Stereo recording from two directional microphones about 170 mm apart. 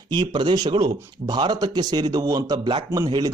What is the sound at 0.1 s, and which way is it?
Speech, 25° right (ahead or behind).